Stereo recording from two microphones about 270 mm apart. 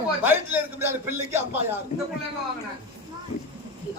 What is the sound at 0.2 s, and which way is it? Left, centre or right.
A woman's voice, centre.